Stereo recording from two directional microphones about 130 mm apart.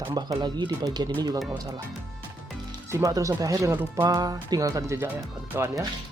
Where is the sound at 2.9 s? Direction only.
25° right (ahead or behind).